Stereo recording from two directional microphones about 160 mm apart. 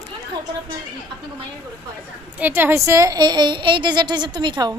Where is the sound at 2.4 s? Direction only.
10° right (ahead or behind); by 4.8 s 25° right (ahead or behind).